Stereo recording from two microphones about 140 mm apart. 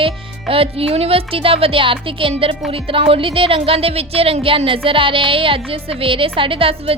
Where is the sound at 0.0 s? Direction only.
40° right (ahead or behind).